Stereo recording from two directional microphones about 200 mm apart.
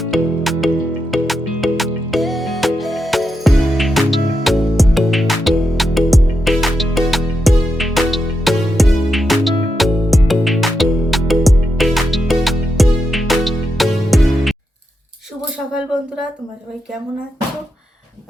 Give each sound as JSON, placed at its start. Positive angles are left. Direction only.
{"t": 0.0, "sound": "music", "side_deg": 0}